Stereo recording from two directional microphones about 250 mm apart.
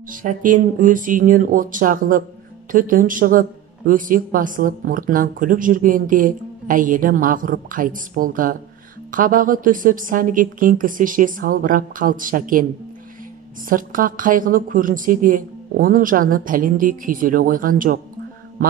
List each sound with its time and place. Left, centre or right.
0.1 s speech: right
13.7 s speech: right